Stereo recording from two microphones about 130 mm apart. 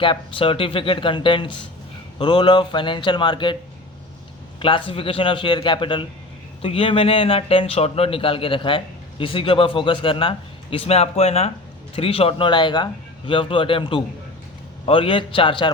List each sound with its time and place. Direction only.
0.0 s a man's voice: 40° left (ahead or behind)
4.6 s a man's voice: 45° left (ahead or behind)